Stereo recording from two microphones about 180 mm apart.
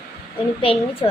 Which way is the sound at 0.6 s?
30° left (ahead or behind).